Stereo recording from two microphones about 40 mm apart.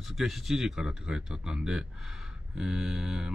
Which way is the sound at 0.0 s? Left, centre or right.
Centre.